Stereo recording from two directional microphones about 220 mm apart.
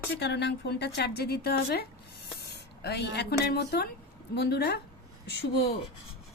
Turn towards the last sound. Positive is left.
turn(degrees=50)  # may be behind; listen again after turning